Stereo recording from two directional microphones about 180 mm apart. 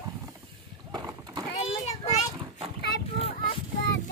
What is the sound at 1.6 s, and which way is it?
Child singing, 35° left (ahead or behind).